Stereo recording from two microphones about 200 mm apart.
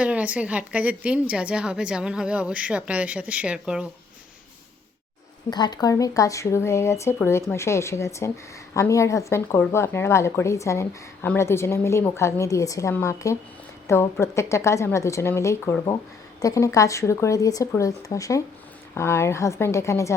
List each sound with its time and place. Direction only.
0.0 s a woman's voice: 5° right (ahead or behind)
5.5 s a woman's voice: 20° left (ahead or behind)